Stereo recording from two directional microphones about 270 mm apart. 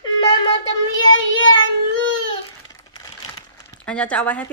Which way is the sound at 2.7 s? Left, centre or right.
Centre.